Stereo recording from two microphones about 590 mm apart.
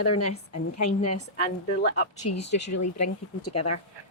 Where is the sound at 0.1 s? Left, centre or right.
Left.